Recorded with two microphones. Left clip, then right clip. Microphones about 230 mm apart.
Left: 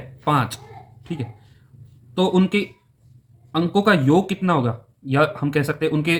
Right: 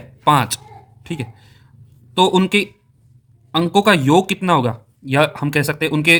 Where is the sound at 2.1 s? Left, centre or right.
Right.